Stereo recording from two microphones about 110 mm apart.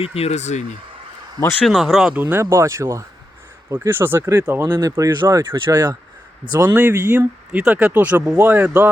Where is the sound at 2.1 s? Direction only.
15° right (ahead or behind); by 6.7 s 40° right (ahead or behind).